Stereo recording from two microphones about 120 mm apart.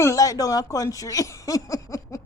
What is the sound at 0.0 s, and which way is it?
A woman's voice, 25° left (ahead or behind).